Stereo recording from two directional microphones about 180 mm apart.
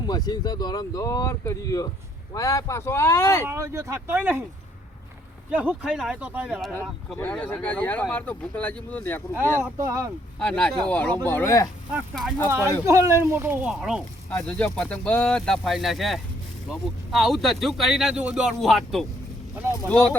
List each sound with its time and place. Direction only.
0.1 s speech: 20° left (ahead or behind)
3.4 s speech: 15° right (ahead or behind)
5.5 s speech: 10° right (ahead or behind)
7.2 s speech: 10° left (ahead or behind)
9.7 s speech: 20° right (ahead or behind)
10.4 s speech: 5° left (ahead or behind)
11.9 s speech: centre (ahead or behind)
12.5 s speech: 10° right (ahead or behind)